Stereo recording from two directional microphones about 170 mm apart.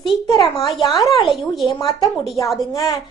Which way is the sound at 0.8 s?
Centre (ahead or behind).